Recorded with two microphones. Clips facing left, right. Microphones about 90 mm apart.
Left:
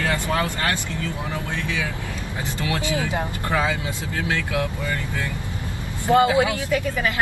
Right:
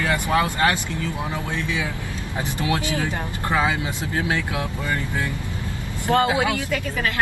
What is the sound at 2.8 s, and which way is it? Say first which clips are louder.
Speech: left 1 dB; 20° left (ahead or behind).